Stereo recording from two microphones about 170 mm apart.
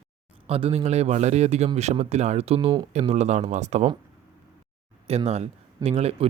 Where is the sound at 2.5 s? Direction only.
25° right (ahead or behind).